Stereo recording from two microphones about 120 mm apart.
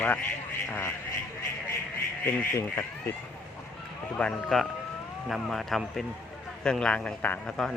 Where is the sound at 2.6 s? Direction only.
20° left (ahead or behind).